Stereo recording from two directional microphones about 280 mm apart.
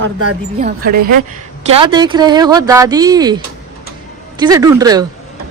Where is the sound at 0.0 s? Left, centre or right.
Right.